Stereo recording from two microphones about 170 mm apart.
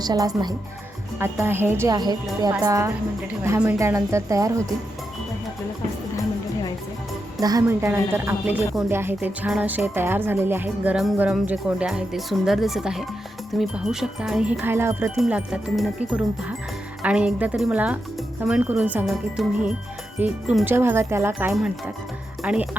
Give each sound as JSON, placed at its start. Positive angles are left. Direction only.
{"t": 0.0, "sound": "speech", "side_deg": -25}
{"t": 7.4, "sound": "speech", "side_deg": -20}